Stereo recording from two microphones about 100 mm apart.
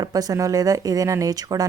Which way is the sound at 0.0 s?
40° right (ahead or behind).